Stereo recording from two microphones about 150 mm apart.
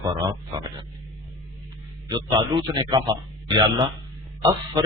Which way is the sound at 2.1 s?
30° right (ahead or behind).